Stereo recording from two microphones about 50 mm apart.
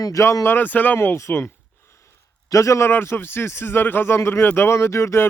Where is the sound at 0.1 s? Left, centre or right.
Left.